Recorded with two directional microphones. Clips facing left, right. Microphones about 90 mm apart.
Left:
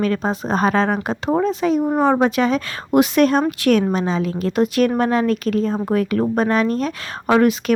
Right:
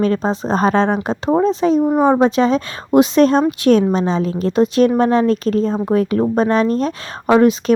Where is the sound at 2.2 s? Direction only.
25° right (ahead or behind).